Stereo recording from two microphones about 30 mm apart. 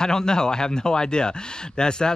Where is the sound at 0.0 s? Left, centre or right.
Left.